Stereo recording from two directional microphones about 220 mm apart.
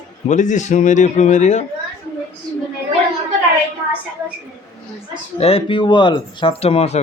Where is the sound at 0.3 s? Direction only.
35° left (ahead or behind).